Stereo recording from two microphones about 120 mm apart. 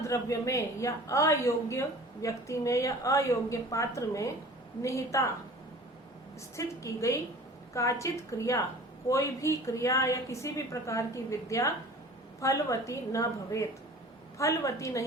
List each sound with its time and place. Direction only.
0.0 s a woman's voice: 25° left (ahead or behind)
6.6 s a woman's voice: 25° left (ahead or behind)